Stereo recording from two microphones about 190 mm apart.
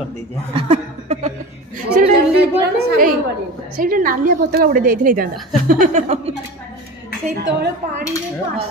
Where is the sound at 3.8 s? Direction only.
45° right (ahead or behind).